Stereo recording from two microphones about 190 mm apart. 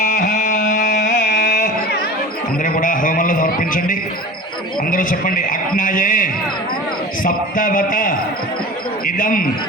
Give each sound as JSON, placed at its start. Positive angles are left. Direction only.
{"t": 0.0, "sound": "a sound", "side_deg": 40}
{"t": 1.5, "sound": "music", "side_deg": 45}
{"t": 2.6, "sound": "a man's voice", "side_deg": 45}